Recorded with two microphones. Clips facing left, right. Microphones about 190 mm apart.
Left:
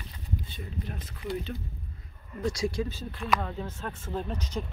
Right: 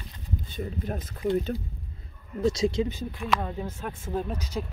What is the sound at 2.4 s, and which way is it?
Speech, 20° right (ahead or behind).